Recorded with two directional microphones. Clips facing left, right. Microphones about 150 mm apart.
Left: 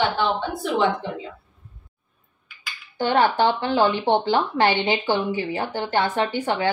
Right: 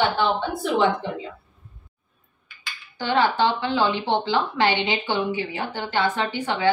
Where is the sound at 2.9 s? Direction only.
50° left (ahead or behind).